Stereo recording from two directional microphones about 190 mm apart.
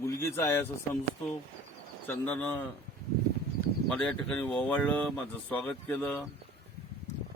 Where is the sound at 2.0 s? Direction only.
10° left (ahead or behind).